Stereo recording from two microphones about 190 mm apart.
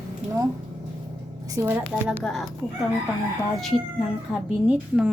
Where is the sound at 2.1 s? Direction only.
Centre (ahead or behind).